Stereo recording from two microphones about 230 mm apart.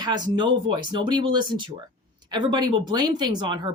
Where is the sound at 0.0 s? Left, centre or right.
Centre.